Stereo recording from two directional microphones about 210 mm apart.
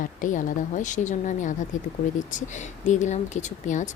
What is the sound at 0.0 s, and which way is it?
Speech, 40° left (ahead or behind).